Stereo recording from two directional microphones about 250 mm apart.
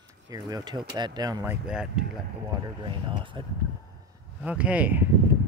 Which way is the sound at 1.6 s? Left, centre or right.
Centre.